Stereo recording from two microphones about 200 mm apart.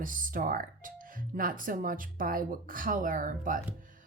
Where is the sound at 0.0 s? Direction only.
45° right (ahead or behind).